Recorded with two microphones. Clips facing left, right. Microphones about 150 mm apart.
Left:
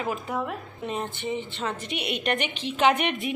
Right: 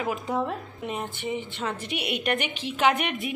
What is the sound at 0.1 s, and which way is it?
A woman's voice, 20° right (ahead or behind).